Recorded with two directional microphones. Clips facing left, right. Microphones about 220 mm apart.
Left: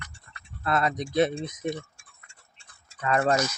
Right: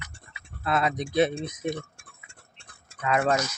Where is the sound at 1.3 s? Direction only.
55° right (ahead or behind).